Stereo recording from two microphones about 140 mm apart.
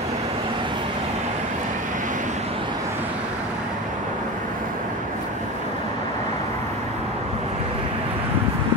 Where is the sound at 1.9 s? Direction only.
65° right (ahead or behind).